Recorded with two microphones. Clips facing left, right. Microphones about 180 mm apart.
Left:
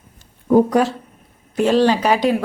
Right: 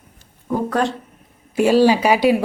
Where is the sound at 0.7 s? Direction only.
10° left (ahead or behind).